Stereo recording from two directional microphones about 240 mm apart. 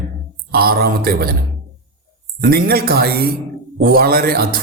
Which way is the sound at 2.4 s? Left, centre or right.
Right.